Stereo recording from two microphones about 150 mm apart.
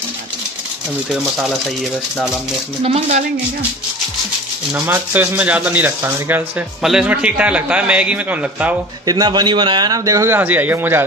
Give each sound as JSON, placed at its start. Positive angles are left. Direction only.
{"t": 2.8, "sound": "speech", "side_deg": -45}
{"t": 4.7, "sound": "speech", "side_deg": -10}
{"t": 9.0, "sound": "a man's voice", "side_deg": -25}